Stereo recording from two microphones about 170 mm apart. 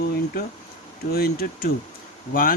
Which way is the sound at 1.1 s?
65° left (ahead or behind).